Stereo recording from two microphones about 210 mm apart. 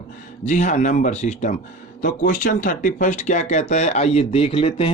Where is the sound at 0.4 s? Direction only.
35° left (ahead or behind).